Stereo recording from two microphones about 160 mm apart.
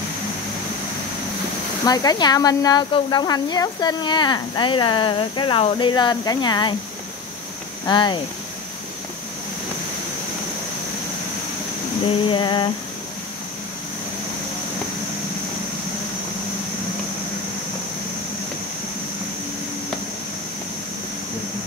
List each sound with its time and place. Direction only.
1.9 s speech: 25° left (ahead or behind)
7.8 s speech: 30° left (ahead or behind)
12.3 s speech: 30° left (ahead or behind)